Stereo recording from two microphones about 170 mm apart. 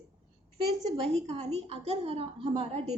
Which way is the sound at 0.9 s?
35° right (ahead or behind).